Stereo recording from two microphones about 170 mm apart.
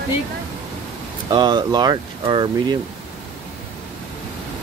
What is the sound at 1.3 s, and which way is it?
Speech, 25° right (ahead or behind).